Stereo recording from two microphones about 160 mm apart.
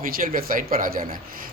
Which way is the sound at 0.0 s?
65° right (ahead or behind).